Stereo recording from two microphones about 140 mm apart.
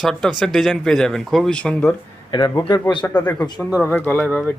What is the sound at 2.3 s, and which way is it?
Speech, 30° left (ahead or behind).